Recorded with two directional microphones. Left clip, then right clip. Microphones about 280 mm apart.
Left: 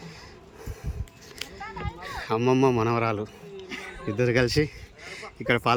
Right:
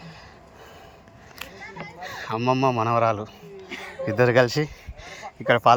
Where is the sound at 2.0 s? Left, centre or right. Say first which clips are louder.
Left 1 dB; centre.